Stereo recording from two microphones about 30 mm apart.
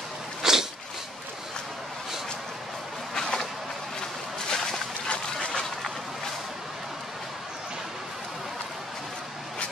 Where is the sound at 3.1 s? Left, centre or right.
Left.